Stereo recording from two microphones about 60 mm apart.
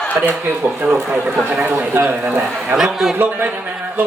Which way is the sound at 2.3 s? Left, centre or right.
Right.